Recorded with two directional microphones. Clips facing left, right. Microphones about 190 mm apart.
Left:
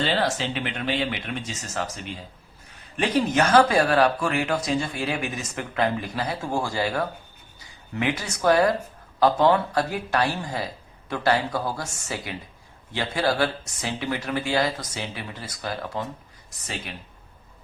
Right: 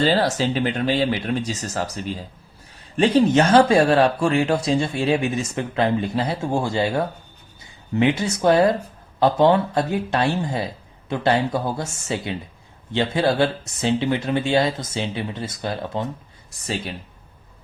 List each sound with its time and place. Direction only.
0.0 s speech: 40° right (ahead or behind)